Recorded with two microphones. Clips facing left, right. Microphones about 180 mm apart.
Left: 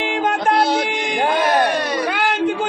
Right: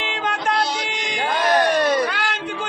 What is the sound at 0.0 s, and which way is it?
Music, 50° left (ahead or behind).